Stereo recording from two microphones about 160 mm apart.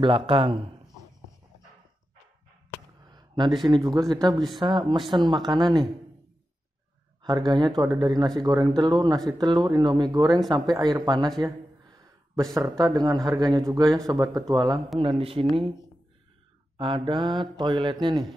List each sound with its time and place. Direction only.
0.0 s a man's voice: 35° right (ahead or behind)
3.1 s speech: 25° right (ahead or behind)
7.2 s speech: 25° right (ahead or behind)
11.3 s a sound: 25° right (ahead or behind)
12.5 s speech: 20° right (ahead or behind)
15.0 s a man's voice: 35° right (ahead or behind)